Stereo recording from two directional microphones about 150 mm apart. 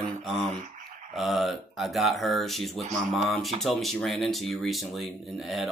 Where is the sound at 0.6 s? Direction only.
50° right (ahead or behind).